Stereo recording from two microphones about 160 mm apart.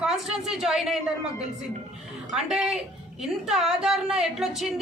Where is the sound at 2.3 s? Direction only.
Centre (ahead or behind).